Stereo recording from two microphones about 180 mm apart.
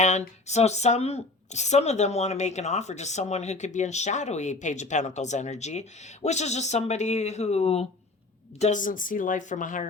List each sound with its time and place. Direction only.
0.0 s speech: 40° left (ahead or behind)